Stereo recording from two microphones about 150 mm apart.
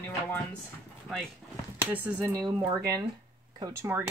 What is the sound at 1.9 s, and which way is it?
Speech, 10° right (ahead or behind).